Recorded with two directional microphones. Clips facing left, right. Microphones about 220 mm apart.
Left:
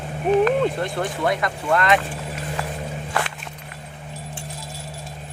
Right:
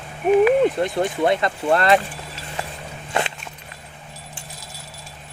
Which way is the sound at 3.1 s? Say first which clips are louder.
Right 3 dB; 20° right (ahead or behind).